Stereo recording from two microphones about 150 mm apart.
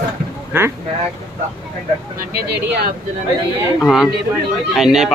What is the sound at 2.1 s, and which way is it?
Speech, 85° right.